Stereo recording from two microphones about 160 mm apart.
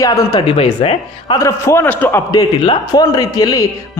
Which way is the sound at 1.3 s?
20° left (ahead or behind).